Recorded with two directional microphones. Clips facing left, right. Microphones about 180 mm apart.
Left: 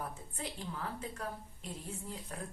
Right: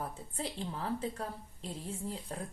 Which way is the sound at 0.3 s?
30° right (ahead or behind).